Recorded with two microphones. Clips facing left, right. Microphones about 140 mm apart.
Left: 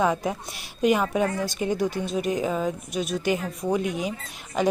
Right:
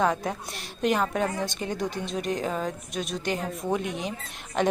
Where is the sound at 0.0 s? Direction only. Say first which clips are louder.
Left 2 dB; 5° left (ahead or behind).